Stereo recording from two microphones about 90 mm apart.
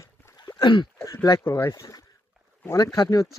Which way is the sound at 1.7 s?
45° left (ahead or behind).